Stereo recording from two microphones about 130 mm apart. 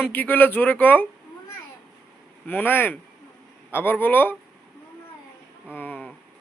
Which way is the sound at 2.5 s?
15° left (ahead or behind).